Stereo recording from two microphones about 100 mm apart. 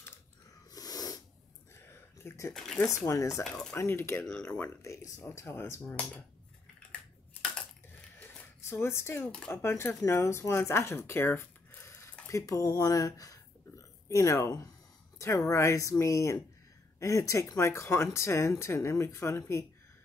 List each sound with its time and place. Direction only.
0.7 s sneeze: 40° left (ahead or behind)
1.9 s a sound: 25° left (ahead or behind)
2.5 s speech: 5° left (ahead or behind)
3.0 s speech: 30° left (ahead or behind)
8.2 s zipper: 25° left (ahead or behind)
9.5 s speech: 25° left (ahead or behind)